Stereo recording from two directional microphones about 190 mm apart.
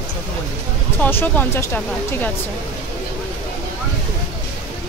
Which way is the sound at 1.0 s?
10° left (ahead or behind).